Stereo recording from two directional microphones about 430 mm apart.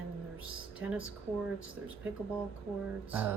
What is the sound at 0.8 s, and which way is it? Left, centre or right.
Speech, centre.